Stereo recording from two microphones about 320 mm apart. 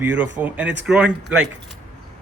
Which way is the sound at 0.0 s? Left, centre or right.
Centre.